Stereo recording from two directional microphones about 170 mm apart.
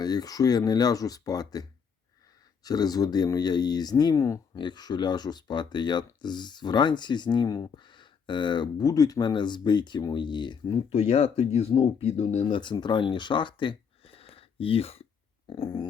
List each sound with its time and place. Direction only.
0.0 s speech: 20° left (ahead or behind)
2.6 s speech: 20° left (ahead or behind); by 12.5 s 40° left (ahead or behind)
12.5 s speech: 25° left (ahead or behind)